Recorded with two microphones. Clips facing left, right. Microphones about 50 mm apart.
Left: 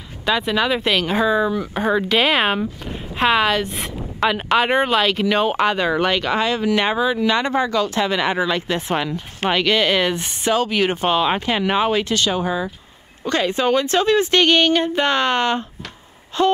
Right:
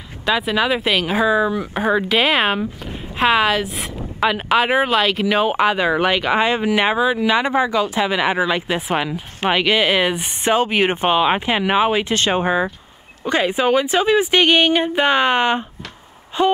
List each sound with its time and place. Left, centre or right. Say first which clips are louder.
0.2 s speech: right 1 dB; centre
10.4 s speech: right 2 dB; right
12.1 s speech: right 2 dB; right
13.2 s speech: right 1 dB; centre